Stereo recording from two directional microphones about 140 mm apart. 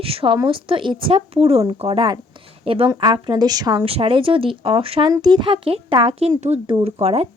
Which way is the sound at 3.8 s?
40° right (ahead or behind).